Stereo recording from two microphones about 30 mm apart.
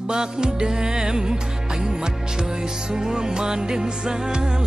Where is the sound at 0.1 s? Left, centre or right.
Right.